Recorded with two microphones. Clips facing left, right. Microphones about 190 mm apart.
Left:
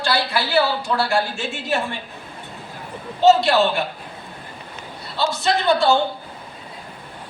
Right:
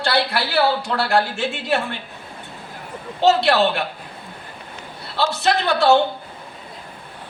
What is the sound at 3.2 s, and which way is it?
Speech, 65° right (ahead or behind).